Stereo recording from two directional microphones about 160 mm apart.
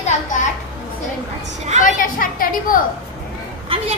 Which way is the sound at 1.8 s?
55° left (ahead or behind).